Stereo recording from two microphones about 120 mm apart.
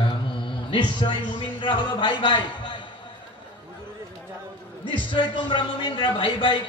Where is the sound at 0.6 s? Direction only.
40° left (ahead or behind).